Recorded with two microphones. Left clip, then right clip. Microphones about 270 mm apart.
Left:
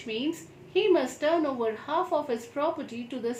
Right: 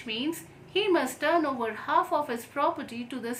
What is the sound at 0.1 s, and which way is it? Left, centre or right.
A woman's voice, centre.